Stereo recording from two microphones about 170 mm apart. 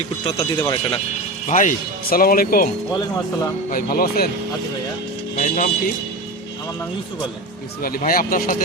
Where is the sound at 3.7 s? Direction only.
60° left (ahead or behind).